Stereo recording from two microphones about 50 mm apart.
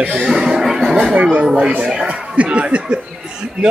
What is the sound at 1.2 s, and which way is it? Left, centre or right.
Speech, right.